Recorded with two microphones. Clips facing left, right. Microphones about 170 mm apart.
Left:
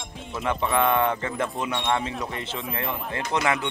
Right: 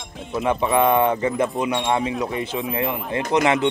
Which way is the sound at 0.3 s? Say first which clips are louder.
Right 5 dB; 20° right (ahead or behind).